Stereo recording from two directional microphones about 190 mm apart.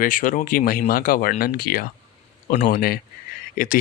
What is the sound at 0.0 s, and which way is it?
Speech, 45° left (ahead or behind).